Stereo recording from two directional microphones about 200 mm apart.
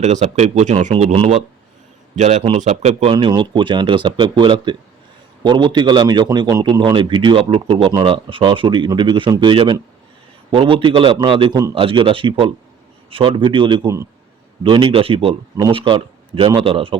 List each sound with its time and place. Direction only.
0.0 s a man's voice: 35° right (ahead or behind)